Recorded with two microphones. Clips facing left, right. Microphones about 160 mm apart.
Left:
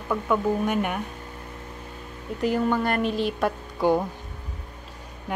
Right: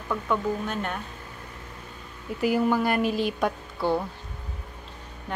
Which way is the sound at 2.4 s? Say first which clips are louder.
Even; 10° right (ahead or behind).